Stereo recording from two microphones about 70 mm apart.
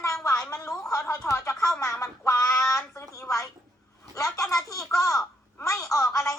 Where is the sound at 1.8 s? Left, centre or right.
Left.